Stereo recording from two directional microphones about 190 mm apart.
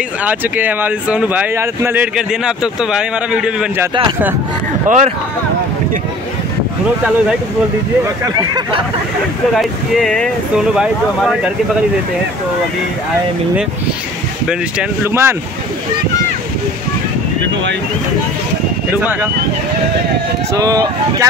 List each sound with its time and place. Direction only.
0.2 s speech: 10° right (ahead or behind)
4.8 s speech: 40° right (ahead or behind)
9.5 s speech: centre (ahead or behind)
14.5 s speech: 10° right (ahead or behind)
20.5 s speech: 20° right (ahead or behind)